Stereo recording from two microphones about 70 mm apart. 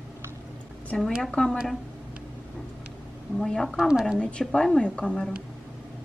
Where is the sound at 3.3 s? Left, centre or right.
Centre.